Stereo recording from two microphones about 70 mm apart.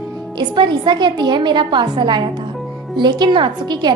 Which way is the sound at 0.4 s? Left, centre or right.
Right.